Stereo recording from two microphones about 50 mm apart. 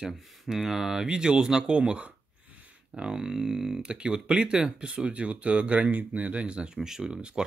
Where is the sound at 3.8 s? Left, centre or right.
Right.